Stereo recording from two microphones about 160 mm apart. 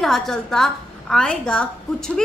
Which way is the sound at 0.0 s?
Centre (ahead or behind).